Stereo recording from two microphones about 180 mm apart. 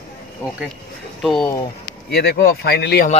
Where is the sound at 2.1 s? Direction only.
60° left (ahead or behind).